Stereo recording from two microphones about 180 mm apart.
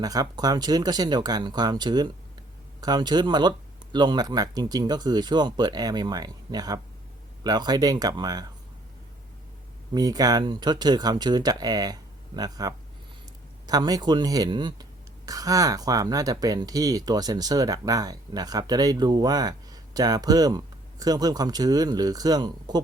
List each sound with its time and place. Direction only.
0.0 s speech: 20° right (ahead or behind)
9.9 s speech: 20° right (ahead or behind)